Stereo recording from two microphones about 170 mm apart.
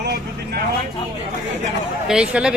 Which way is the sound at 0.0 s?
75° right (ahead or behind).